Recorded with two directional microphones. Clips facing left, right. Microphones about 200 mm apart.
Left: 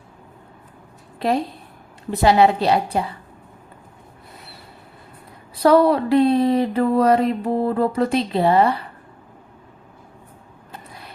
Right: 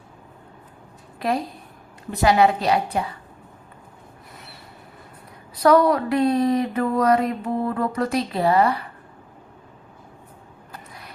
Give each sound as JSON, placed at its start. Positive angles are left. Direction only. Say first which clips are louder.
{"t": 1.2, "sound": "a woman's voice", "louder": "left 3 dB", "side_deg": 30}
{"t": 5.5, "sound": "speech", "louder": "left 2 dB", "side_deg": 30}
{"t": 10.7, "sound": "a sound", "louder": "left 2 dB", "side_deg": 30}